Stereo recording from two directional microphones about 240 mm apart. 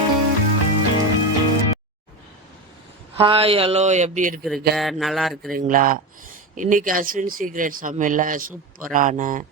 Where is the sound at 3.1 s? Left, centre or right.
Right.